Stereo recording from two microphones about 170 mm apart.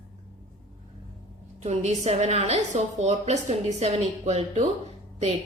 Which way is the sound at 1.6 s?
40° right (ahead or behind).